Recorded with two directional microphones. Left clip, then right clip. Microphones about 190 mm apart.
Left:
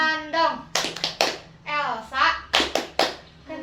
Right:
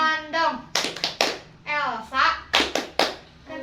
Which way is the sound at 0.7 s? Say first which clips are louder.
Even; 25° left (ahead or behind).